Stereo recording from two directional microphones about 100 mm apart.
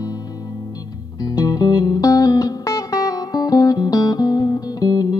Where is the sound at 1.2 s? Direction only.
40° left (ahead or behind).